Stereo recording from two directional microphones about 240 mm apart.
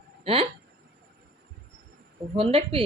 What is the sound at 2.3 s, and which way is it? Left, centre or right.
Speech, right.